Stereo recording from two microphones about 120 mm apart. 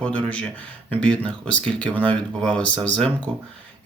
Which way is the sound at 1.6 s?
10° left (ahead or behind).